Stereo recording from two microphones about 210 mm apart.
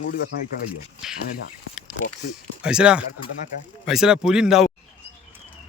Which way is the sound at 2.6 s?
5° right (ahead or behind).